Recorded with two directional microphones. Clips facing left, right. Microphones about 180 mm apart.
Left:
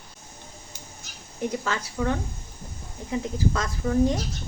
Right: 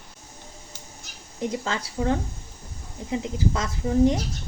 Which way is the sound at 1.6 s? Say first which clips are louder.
Even; 25° right (ahead or behind).